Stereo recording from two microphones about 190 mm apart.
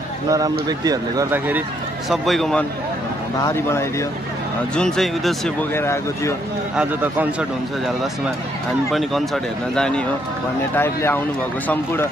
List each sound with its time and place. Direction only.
0.3 s speech: 20° right (ahead or behind)
2.0 s a man's voice: centre (ahead or behind)
3.4 s speech: 15° left (ahead or behind)
4.7 s a man's voice: 5° left (ahead or behind)
5.8 s speech: 15° left (ahead or behind)
6.8 s a man's voice: 10° right (ahead or behind); by 12.1 s 10° left (ahead or behind)